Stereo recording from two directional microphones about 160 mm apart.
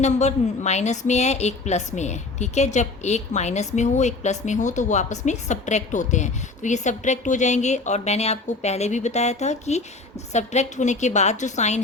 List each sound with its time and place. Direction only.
0.0 s a woman's voice: 45° left (ahead or behind)